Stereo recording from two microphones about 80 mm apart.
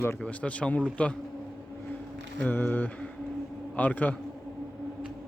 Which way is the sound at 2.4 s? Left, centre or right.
Left.